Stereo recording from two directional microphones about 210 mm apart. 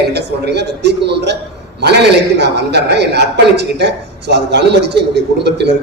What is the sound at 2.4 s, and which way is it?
A man's voice, 55° right (ahead or behind).